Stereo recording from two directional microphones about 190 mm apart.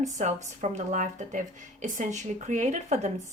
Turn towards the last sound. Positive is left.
turn(degrees=-40)  # may be behind; listen again after turning